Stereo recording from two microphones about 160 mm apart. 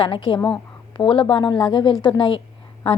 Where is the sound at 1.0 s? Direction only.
35° left (ahead or behind).